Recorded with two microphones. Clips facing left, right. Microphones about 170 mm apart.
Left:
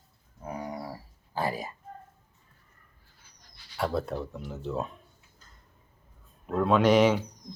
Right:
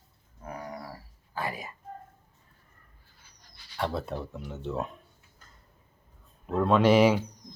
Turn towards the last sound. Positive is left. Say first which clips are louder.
# even
turn(degrees=-5)  # may be behind; listen again after turning